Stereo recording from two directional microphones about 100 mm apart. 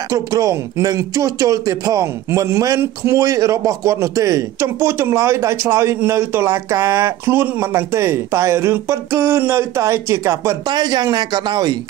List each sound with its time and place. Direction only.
0.1 s speech: 35° right (ahead or behind)
10.7 s speech: 45° right (ahead or behind)